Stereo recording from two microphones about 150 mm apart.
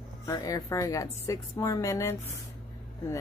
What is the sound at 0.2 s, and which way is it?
A woman's voice, 25° left (ahead or behind).